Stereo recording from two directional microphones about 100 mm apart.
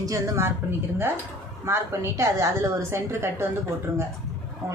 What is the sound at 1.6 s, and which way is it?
A woman's voice, 25° right (ahead or behind).